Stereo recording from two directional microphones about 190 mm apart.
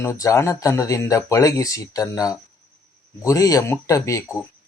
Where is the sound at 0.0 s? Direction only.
15° left (ahead or behind).